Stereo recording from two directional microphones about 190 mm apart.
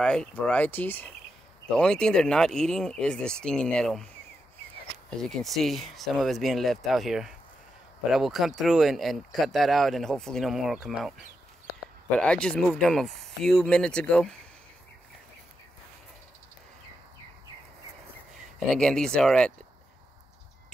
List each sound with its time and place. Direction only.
0.0 s speech: 5° left (ahead or behind)
5.2 s speech: centre (ahead or behind)
12.2 s speech: 5° left (ahead or behind)
18.7 s speech: 5° left (ahead or behind)